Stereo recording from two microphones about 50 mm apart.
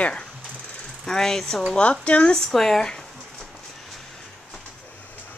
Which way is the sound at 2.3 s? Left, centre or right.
Centre.